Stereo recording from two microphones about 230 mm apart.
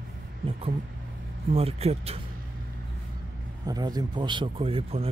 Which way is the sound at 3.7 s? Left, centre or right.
Centre.